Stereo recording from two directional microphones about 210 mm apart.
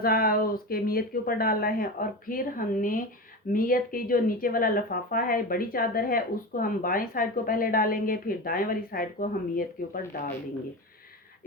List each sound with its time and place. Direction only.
0.0 s speech: 45° left (ahead or behind)